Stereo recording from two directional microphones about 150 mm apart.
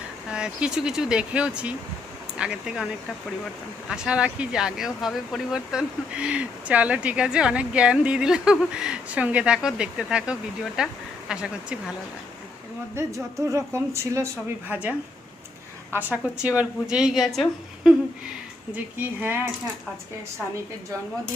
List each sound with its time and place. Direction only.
0.3 s a woman's voice: 5° right (ahead or behind)
3.8 s a woman's voice: 5° right (ahead or behind)
13.0 s speech: 20° right (ahead or behind)
16.1 s a woman's voice: 5° right (ahead or behind)
18.9 s speech: 15° right (ahead or behind)